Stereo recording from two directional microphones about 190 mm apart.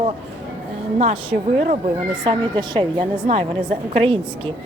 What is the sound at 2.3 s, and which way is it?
A woman's voice, 25° right (ahead or behind).